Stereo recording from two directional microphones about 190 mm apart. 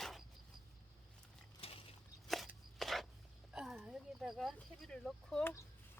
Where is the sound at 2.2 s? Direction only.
Centre (ahead or behind).